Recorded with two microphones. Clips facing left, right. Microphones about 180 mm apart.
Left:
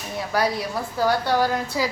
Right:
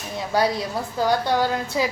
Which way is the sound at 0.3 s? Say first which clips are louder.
Right 2 dB; 25° right (ahead or behind).